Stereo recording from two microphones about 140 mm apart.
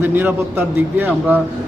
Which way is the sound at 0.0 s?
15° right (ahead or behind).